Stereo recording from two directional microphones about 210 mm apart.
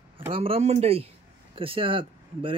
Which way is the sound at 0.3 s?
25° right (ahead or behind).